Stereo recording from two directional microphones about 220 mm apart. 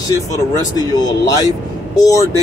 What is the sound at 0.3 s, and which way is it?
Speech, 15° left (ahead or behind).